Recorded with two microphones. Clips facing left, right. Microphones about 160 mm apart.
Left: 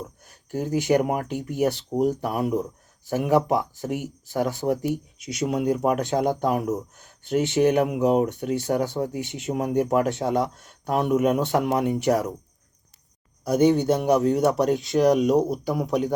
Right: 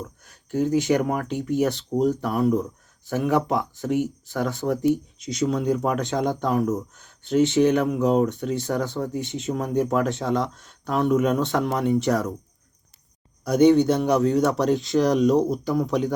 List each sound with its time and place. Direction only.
0.7 s speech: 10° left (ahead or behind)
3.6 s speech: 45° left (ahead or behind)
3.9 s speech: 10° left (ahead or behind)
7.6 s speech: 35° left (ahead or behind)
7.9 s speech: 10° left (ahead or behind)
13.4 s speech: 10° left (ahead or behind)